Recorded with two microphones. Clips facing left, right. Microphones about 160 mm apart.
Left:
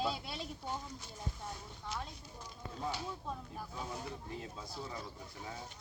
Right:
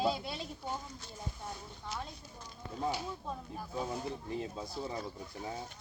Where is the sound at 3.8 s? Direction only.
25° right (ahead or behind).